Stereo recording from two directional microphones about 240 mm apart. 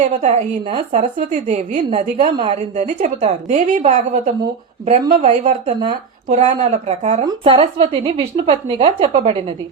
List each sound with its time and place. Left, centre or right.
0.2 s a woman's voice: right